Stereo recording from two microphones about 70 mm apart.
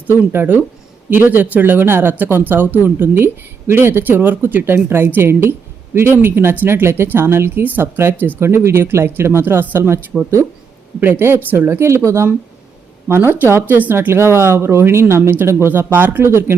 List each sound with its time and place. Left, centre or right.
0.1 s a woman's voice: right
11.0 s a woman's voice: right